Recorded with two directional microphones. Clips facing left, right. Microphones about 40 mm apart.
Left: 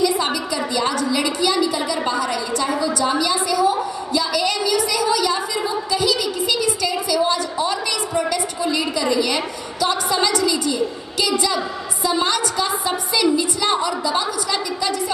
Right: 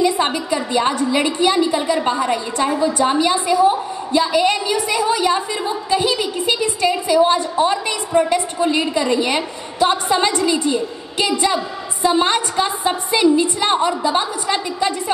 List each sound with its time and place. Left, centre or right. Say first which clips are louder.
0.0 s a woman's voice: right 2 dB; right